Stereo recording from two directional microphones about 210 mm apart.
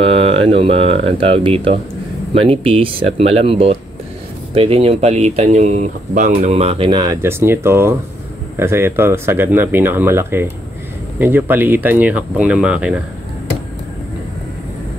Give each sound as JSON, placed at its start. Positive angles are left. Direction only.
{"t": 0.0, "sound": "speech", "side_deg": -25}